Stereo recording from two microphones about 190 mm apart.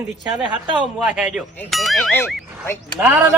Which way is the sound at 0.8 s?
5° right (ahead or behind).